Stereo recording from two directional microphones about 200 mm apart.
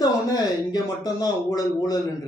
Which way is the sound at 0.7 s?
20° left (ahead or behind).